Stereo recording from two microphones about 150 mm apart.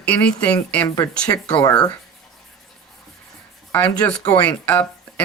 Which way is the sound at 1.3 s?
20° left (ahead or behind).